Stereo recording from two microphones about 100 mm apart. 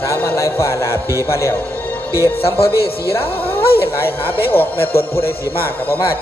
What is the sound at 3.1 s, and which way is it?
A woman's voice, 20° left (ahead or behind).